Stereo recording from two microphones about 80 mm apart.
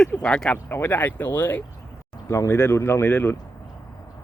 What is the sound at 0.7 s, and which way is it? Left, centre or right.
Speech, left.